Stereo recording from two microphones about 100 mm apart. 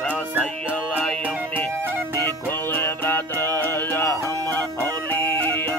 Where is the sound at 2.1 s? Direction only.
20° left (ahead or behind).